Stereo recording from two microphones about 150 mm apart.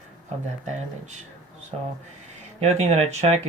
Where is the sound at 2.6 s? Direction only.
45° right (ahead or behind).